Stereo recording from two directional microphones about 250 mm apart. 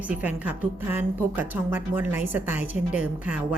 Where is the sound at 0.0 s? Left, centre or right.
Centre.